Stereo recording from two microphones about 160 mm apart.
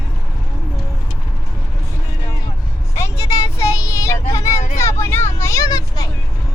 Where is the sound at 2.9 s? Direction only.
20° left (ahead or behind).